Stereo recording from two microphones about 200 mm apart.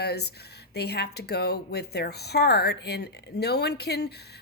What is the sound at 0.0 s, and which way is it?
A woman's voice, 55° left (ahead or behind).